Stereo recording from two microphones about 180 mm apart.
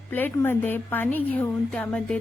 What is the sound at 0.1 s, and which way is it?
A woman's voice, 10° left (ahead or behind).